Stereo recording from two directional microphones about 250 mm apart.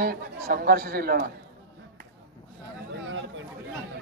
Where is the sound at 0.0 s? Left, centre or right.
Right.